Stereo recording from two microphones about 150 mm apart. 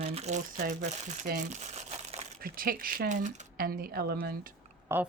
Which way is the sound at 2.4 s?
75° right (ahead or behind).